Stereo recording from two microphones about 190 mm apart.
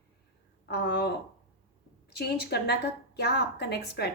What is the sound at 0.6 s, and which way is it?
A woman's voice, 55° left (ahead or behind).